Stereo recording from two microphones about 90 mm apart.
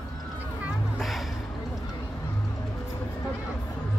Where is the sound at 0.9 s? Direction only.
Centre (ahead or behind).